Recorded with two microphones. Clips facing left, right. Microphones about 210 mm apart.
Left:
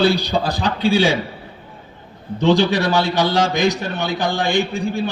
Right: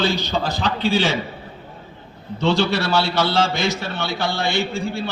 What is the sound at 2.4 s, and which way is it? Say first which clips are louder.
A man's voice: left 4 dB; 15° left (ahead or behind).